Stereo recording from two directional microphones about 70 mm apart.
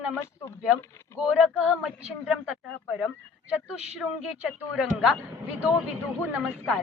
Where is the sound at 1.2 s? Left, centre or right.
Centre.